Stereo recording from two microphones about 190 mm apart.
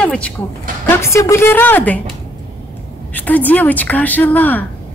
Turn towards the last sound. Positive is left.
turn(degrees=10)  # may be behind; listen again after turning